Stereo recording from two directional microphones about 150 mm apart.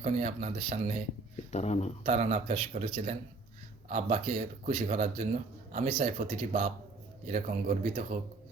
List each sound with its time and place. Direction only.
0.0 s speech: 50° right (ahead or behind)
1.5 s speech: 45° left (ahead or behind)
2.0 s speech: 50° right (ahead or behind)